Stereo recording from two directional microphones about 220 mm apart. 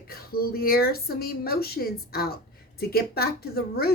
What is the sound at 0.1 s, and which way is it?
A woman's voice, 45° left (ahead or behind).